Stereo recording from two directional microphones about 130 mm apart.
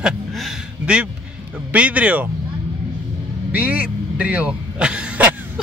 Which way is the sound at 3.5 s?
10° right (ahead or behind).